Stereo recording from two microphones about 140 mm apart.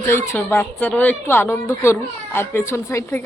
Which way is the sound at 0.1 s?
15° left (ahead or behind).